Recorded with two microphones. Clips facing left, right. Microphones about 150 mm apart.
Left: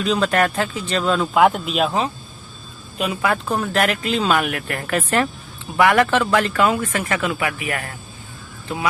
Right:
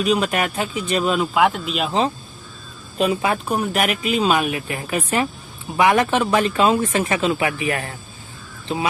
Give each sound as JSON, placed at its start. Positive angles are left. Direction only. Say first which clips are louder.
{"t": 0.0, "sound": "speech", "louder": "left 1 dB", "side_deg": -15}
{"t": 1.3, "sound": "speech", "louder": "left 2 dB", "side_deg": 0}
{"t": 3.0, "sound": "speech", "louder": "right 2 dB", "side_deg": -25}